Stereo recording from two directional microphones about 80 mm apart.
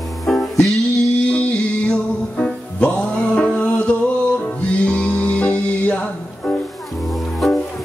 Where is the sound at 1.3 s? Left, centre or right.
Centre.